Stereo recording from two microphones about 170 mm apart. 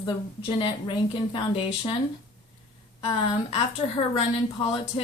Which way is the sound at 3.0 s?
35° left (ahead or behind).